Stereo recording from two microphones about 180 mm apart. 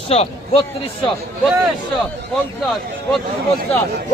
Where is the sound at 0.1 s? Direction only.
35° left (ahead or behind).